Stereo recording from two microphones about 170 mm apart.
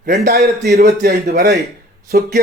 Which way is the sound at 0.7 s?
65° right (ahead or behind).